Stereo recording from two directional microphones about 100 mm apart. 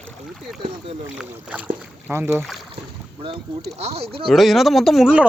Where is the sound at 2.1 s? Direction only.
25° right (ahead or behind).